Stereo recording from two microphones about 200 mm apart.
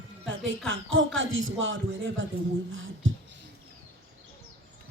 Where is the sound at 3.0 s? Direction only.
75° right (ahead or behind).